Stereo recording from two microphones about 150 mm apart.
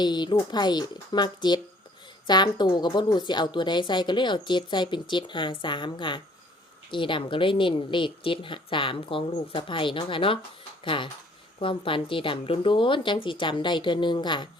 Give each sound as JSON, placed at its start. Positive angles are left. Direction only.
{"t": 0.0, "sound": "a woman's voice", "side_deg": 30}